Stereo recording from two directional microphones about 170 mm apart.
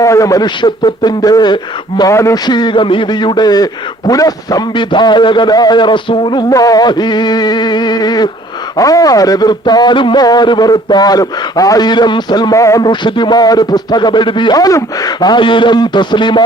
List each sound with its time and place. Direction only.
0.0 s speech: 20° left (ahead or behind)